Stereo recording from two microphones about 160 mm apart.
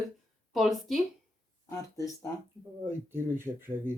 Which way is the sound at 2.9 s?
15° right (ahead or behind).